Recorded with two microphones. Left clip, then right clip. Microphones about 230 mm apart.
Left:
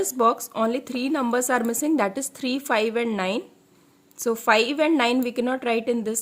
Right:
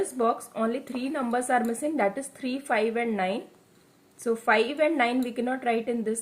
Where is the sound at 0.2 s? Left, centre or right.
Left.